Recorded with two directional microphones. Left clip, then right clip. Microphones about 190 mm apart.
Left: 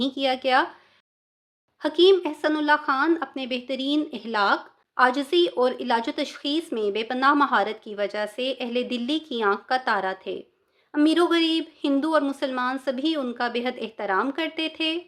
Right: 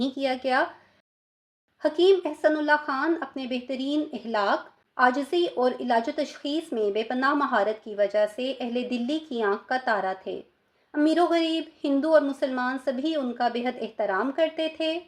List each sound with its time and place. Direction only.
0.0 s a woman's voice: 20° left (ahead or behind)
1.8 s a woman's voice: 20° left (ahead or behind)